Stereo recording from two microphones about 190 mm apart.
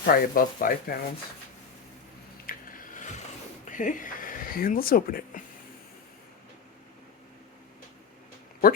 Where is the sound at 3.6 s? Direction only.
40° left (ahead or behind).